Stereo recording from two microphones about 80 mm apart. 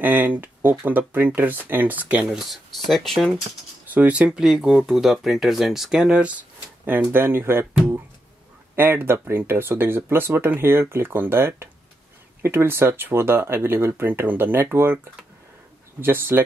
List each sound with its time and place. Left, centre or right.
0.0 s speech: right
2.2 s speech: centre
3.9 s speech: centre
4.5 s speech: centre
6.9 s speech: right
16.0 s speech: right